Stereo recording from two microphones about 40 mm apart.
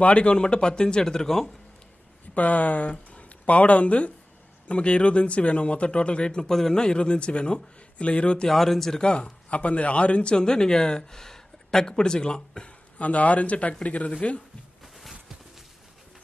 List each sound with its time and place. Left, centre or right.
0.0 s speech: left; by 1.5 s centre
2.3 s speech: left
8.5 s speech: centre
9.0 s a man's voice: left
10.3 s speech: centre
13.0 s a man's voice: left